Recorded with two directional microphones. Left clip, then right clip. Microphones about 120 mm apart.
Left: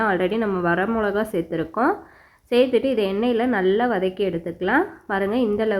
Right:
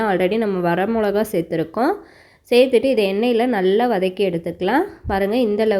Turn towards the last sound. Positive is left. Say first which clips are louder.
# right 4 dB
turn(degrees=-40)  # may be behind; listen again after turning